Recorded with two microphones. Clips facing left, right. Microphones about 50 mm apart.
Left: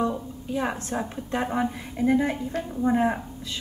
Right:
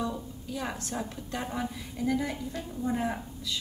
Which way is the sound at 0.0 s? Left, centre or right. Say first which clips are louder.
Left 7 dB; left.